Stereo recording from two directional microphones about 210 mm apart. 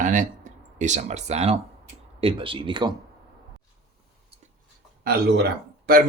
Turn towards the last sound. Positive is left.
turn(degrees=-45)  # may be behind; listen again after turning